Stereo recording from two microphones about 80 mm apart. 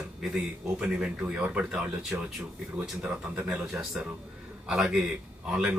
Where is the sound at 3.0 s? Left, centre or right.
Centre.